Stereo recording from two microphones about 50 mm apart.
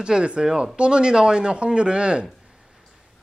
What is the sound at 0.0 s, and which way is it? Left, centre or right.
A man's voice, centre.